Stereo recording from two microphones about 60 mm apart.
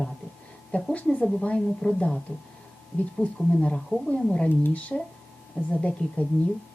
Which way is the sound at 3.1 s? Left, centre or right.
Centre.